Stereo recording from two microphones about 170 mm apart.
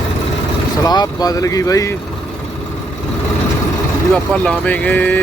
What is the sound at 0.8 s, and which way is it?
Speech, 25° left (ahead or behind).